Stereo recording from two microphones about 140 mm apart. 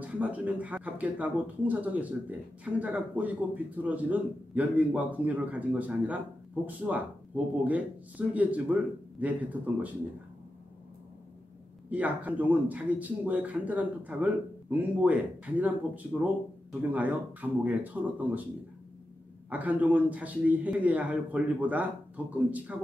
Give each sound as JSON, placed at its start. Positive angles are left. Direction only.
{"t": 0.0, "sound": "speech", "side_deg": -10}
{"t": 11.9, "sound": "speech", "side_deg": -10}
{"t": 19.5, "sound": "speech", "side_deg": -10}